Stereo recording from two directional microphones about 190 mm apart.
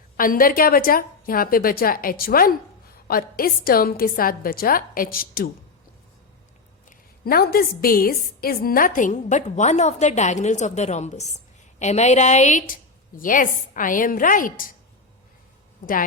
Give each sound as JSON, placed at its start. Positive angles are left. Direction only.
{"t": 0.2, "sound": "a woman's voice", "side_deg": 45}
{"t": 6.9, "sound": "a woman's voice", "side_deg": 50}